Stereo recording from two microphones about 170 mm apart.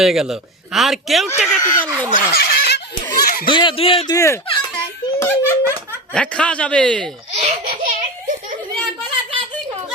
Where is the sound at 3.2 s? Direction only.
65° left (ahead or behind).